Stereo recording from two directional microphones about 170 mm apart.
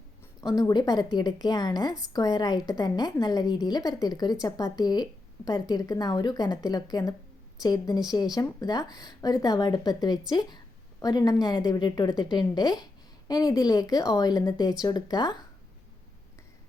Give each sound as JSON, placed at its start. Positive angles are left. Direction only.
{"t": 0.4, "sound": "a woman's voice", "side_deg": 20}